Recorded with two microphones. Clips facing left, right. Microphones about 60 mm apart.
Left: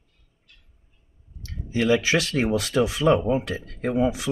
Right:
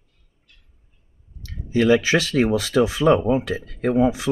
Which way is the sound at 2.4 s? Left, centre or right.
Right.